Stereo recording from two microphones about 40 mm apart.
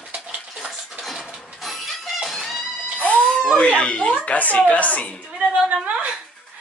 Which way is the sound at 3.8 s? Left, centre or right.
Left.